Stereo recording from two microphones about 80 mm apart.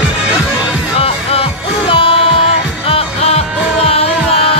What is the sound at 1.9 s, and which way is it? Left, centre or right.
Music, left.